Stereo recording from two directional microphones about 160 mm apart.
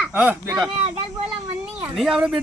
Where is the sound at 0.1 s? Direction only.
10° right (ahead or behind).